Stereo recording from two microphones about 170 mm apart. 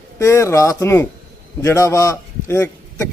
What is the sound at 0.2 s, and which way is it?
A man's voice, 15° left (ahead or behind).